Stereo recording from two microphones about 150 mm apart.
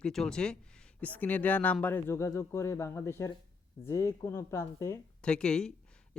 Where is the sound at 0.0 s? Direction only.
5° left (ahead or behind); by 4.9 s 20° left (ahead or behind).